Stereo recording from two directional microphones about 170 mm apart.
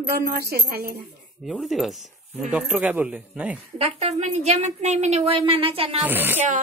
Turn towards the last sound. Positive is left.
turn(degrees=-10)  # may be behind; listen again after turning